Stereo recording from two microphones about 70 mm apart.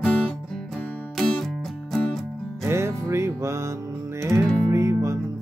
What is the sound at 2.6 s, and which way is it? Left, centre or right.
Music, right.